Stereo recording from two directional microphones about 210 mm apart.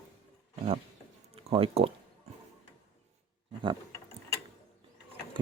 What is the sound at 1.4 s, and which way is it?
Speech, 25° right (ahead or behind).